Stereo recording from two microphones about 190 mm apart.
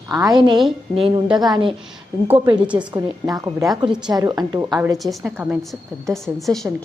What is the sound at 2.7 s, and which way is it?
A woman's voice, 20° right (ahead or behind).